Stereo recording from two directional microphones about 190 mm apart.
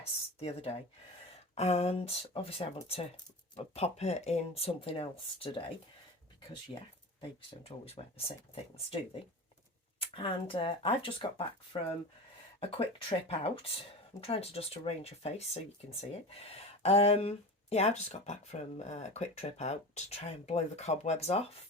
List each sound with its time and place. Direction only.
0.3 s speech: 30° left (ahead or behind)
10.0 s speech: 30° left (ahead or behind)